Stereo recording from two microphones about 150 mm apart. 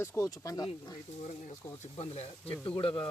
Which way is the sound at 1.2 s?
55° left (ahead or behind).